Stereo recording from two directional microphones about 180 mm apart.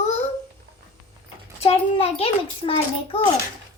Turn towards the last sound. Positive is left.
turn(degrees=30)  # may be behind; listen again after turning